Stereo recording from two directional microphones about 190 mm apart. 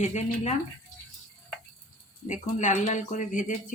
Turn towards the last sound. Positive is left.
turn(degrees=45)  # may be behind; listen again after turning